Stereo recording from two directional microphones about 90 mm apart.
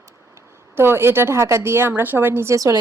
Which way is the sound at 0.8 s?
25° right (ahead or behind).